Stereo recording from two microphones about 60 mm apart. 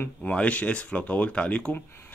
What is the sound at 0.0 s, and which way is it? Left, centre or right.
Speech, left.